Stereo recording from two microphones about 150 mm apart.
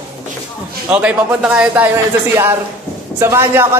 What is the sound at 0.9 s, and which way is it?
Speech, 10° right (ahead or behind).